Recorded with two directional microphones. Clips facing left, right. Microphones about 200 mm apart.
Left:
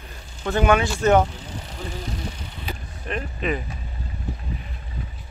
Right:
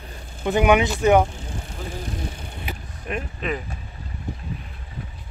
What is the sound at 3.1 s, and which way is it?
Speech, 10° right (ahead or behind).